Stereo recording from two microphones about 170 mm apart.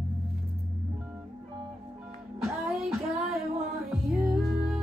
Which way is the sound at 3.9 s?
Centre (ahead or behind).